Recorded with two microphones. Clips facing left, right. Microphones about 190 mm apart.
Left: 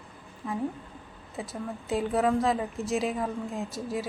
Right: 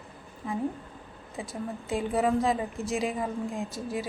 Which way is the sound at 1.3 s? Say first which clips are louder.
Even; centre (ahead or behind).